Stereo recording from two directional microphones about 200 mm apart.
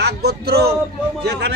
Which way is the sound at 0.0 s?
55° right (ahead or behind).